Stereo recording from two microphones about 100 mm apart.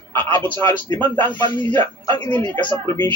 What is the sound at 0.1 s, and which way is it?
A man's voice, 20° left (ahead or behind).